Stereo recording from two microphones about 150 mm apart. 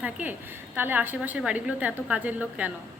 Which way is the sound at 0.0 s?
10° right (ahead or behind).